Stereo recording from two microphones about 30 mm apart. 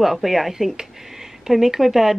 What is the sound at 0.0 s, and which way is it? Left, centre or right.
Speech, centre.